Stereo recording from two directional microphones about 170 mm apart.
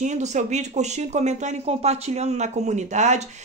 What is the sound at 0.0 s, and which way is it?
Speech, 45° right (ahead or behind).